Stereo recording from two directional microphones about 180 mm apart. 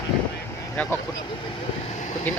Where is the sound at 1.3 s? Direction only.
30° left (ahead or behind).